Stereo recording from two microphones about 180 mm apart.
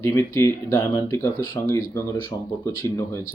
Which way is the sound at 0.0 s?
15° left (ahead or behind).